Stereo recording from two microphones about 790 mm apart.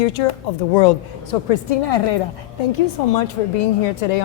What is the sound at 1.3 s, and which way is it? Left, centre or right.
Speech, left.